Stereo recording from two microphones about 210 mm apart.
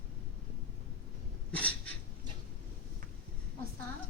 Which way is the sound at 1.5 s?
5° left (ahead or behind).